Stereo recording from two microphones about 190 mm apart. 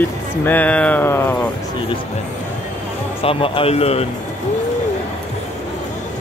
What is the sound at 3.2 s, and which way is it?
Speech, 30° left (ahead or behind).